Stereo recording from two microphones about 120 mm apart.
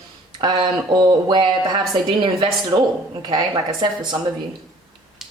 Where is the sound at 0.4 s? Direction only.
40° right (ahead or behind).